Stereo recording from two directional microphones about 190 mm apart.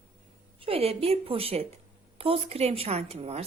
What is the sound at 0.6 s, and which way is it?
Speech, 30° right (ahead or behind).